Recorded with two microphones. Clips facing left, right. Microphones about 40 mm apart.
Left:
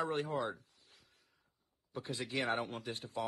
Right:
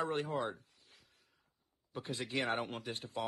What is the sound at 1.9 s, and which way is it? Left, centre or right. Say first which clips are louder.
Speech: even; right.